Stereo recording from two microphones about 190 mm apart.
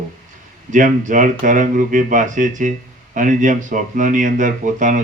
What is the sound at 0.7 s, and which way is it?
Speech, 45° right (ahead or behind).